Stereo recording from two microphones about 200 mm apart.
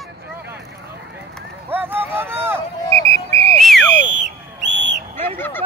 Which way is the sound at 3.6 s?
Centre (ahead or behind).